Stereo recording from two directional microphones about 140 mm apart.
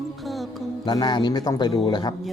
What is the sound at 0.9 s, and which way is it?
Speech, 30° left (ahead or behind).